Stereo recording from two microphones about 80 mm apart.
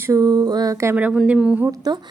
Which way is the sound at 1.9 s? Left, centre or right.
Right.